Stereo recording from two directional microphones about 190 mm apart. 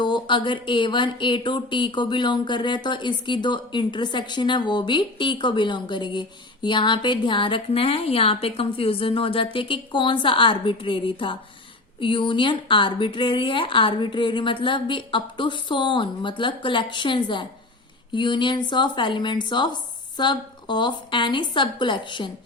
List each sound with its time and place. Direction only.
0.0 s speech: 25° left (ahead or behind)